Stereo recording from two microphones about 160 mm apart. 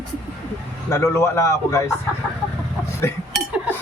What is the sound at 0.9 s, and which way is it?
Speech, 15° left (ahead or behind).